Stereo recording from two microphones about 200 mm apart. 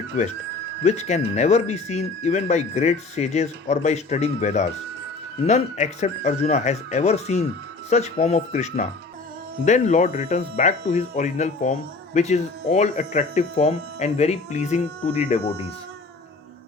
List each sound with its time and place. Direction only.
0.1 s speech: 40° left (ahead or behind)